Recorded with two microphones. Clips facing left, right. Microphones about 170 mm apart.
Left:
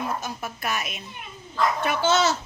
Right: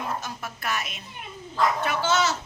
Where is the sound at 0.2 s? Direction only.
15° left (ahead or behind).